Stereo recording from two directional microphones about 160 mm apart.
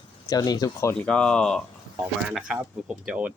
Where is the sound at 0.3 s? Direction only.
25° left (ahead or behind).